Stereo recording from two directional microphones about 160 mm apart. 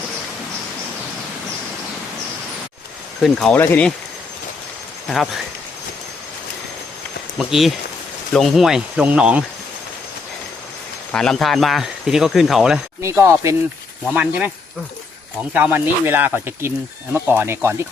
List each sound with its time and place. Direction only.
3.2 s speech: 5° left (ahead or behind)
5.0 s speech: centre (ahead or behind)
7.3 s speech: centre (ahead or behind)
11.1 s speech: 5° left (ahead or behind)
13.0 s speech: 15° right (ahead or behind)
15.5 s speech: 10° right (ahead or behind)